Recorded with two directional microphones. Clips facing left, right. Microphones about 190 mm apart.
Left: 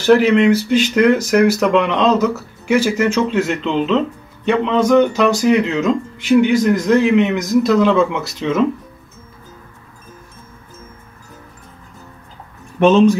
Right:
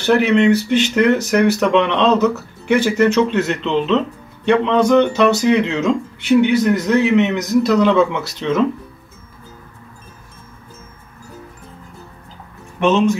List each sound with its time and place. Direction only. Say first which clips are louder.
0.0 s speech: left 2 dB; centre (ahead or behind)
12.8 s speech: left 4 dB; 35° left (ahead or behind)